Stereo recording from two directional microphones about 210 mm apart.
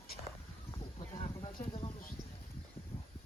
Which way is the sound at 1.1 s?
25° left (ahead or behind).